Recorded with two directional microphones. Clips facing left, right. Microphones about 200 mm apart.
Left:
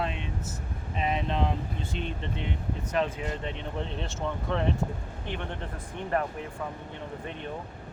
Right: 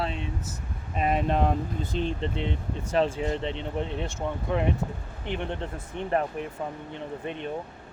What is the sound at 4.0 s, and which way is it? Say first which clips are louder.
Speech: right 2 dB; 15° right (ahead or behind).